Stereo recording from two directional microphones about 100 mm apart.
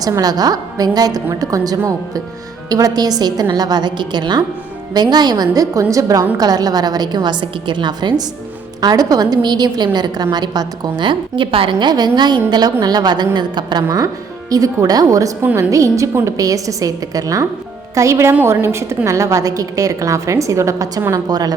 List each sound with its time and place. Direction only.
0.2 s a woman's voice: 40° right (ahead or behind)